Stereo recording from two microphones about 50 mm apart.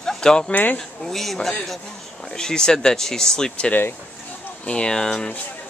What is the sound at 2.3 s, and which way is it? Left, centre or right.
Speech, centre.